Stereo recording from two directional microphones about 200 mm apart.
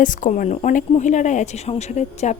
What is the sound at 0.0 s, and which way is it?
Speech, 40° left (ahead or behind).